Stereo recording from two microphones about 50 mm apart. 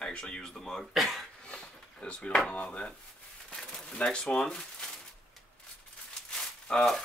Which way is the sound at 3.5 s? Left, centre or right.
Centre.